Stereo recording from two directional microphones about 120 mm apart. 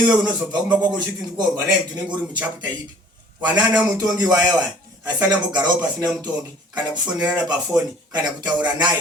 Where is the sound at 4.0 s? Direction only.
30° right (ahead or behind).